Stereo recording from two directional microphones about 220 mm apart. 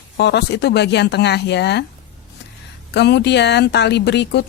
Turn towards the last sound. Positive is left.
turn(degrees=50)  # may be behind; listen again after turning